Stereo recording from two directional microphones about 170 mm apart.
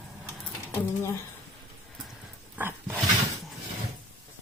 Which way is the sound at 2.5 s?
15° right (ahead or behind).